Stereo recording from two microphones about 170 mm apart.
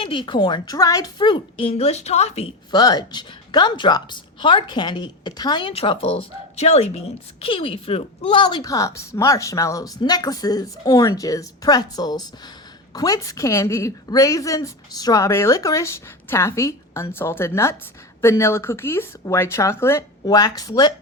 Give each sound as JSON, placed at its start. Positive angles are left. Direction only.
{"t": 0.0, "sound": "a woman's voice", "side_deg": 30}
{"t": 2.7, "sound": "a woman's voice", "side_deg": 25}